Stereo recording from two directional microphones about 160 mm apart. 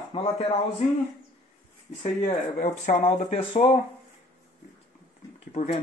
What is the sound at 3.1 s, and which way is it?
Speech, 40° left (ahead or behind).